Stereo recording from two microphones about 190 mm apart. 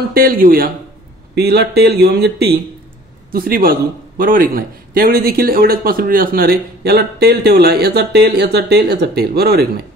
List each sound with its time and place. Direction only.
0.1 s a man's voice: 50° right (ahead or behind)